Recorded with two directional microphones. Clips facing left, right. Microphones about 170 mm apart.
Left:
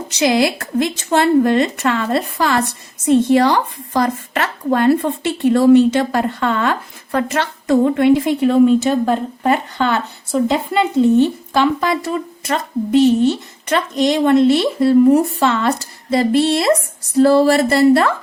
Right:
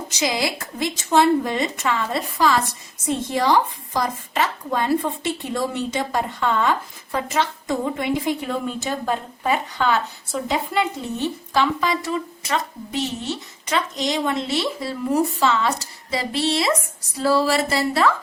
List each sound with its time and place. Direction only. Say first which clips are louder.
0.1 s speech: left 9 dB; 65° left (ahead or behind)
11.5 s speech: left 2 dB; 55° left (ahead or behind)